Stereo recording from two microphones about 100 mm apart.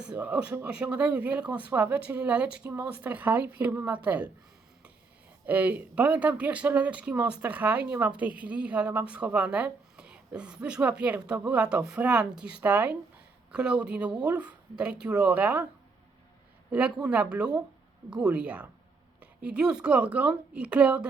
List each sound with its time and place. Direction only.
0.0 s speech: 10° right (ahead or behind)
5.5 s speech: 15° right (ahead or behind)
16.7 s speech: 10° right (ahead or behind)